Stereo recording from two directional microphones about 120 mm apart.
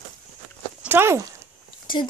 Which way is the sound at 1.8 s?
40° left (ahead or behind).